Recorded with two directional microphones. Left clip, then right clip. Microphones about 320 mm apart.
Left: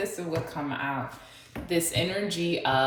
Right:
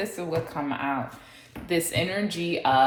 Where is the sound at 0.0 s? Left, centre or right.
Right.